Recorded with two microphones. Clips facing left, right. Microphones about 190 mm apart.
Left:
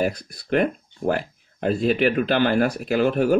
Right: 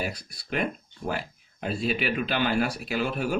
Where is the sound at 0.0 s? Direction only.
55° left (ahead or behind).